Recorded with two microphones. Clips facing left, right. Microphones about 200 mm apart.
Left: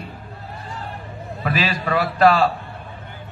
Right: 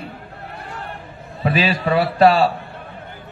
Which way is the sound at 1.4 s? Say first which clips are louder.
Right 4 dB; 30° right (ahead or behind).